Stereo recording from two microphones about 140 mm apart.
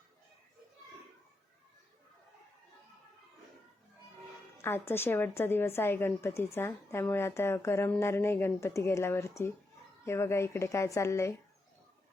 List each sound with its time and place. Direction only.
4.5 s a woman's voice: 15° left (ahead or behind)